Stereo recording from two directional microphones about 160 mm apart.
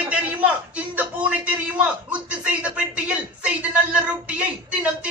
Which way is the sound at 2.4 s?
5° right (ahead or behind).